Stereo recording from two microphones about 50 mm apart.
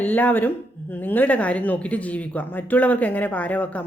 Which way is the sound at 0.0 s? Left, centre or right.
Left.